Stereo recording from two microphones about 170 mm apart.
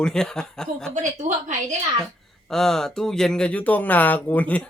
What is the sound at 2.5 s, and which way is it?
Speech, centre (ahead or behind).